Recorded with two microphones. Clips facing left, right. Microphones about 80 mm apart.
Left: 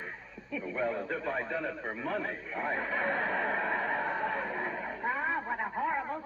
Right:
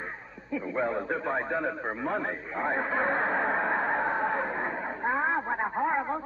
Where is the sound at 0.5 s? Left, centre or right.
Right.